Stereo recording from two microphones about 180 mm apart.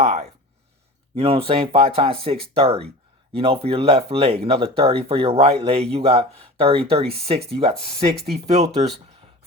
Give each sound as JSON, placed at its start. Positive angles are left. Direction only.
{"t": 0.0, "sound": "speech", "side_deg": -35}